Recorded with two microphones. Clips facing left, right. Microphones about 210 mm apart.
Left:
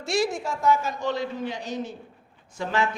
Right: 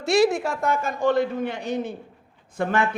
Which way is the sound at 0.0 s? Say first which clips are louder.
Right 6 dB; 65° right (ahead or behind).